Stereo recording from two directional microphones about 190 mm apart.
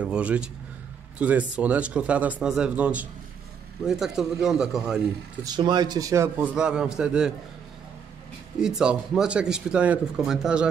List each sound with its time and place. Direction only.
0.0 s speech: 5° right (ahead or behind)
5.4 s speech: 20° right (ahead or behind); by 7.3 s 5° right (ahead or behind)
8.5 s speech: 5° right (ahead or behind)